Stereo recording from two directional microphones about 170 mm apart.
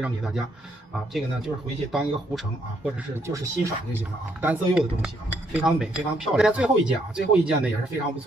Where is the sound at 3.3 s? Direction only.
20° right (ahead or behind).